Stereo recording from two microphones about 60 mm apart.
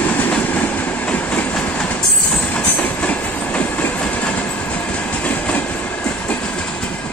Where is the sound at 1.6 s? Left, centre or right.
Centre.